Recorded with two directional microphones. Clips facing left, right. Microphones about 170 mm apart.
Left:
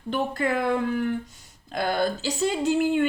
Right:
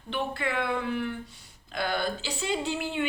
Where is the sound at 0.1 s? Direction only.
40° left (ahead or behind).